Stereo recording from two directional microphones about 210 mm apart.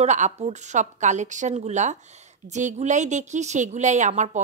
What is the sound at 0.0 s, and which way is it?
A woman's voice, 30° right (ahead or behind).